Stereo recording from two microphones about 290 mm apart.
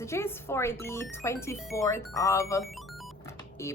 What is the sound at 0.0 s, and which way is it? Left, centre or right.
Speech, centre.